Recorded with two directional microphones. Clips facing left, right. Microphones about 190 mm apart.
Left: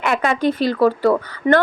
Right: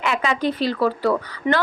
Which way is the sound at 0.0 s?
55° left (ahead or behind).